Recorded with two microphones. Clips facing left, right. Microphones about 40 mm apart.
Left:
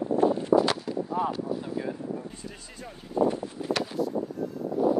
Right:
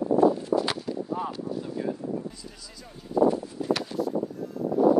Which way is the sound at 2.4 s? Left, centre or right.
Left.